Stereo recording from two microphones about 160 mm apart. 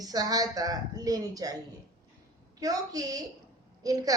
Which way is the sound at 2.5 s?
20° right (ahead or behind).